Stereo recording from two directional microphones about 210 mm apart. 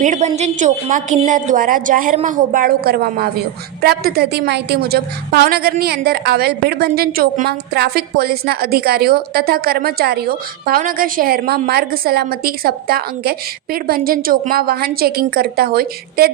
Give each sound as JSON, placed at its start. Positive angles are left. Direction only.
{"t": 0.0, "sound": "a woman's voice", "side_deg": -35}